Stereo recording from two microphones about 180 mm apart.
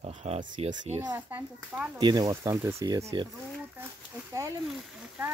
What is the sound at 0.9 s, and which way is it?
Speech, 15° right (ahead or behind).